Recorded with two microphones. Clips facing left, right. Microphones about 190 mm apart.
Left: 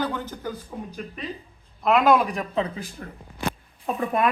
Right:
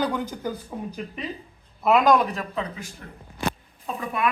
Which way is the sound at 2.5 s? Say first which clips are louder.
Left 4 dB; 25° left (ahead or behind).